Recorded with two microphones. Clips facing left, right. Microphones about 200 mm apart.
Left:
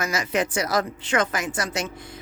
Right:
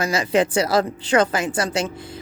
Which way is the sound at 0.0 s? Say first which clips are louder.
Right 5 dB; 30° right (ahead or behind).